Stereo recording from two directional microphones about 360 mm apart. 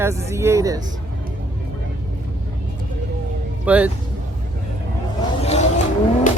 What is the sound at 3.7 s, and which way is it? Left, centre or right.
Speech, centre.